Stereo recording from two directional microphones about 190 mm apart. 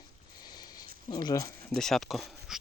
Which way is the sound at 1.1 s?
20° left (ahead or behind).